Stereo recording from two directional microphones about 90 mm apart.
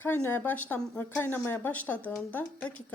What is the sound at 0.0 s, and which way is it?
A woman's voice, 20° left (ahead or behind).